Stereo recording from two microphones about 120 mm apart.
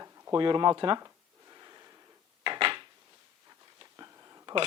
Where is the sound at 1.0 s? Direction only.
30° right (ahead or behind).